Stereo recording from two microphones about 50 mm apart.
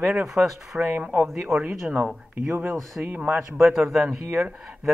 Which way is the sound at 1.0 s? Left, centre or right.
Right.